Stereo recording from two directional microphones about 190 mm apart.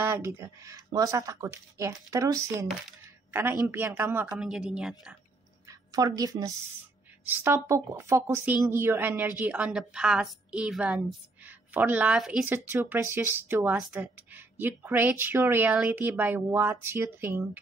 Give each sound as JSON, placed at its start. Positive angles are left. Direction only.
{"t": 0.0, "sound": "a woman's voice", "side_deg": -15}
{"t": 5.7, "sound": "a woman's voice", "side_deg": -20}